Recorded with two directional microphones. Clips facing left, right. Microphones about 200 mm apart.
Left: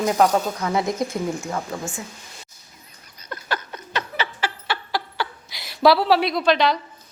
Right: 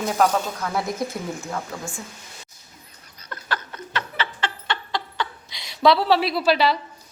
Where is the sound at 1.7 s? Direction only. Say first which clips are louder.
Left 3 dB; 15° left (ahead or behind).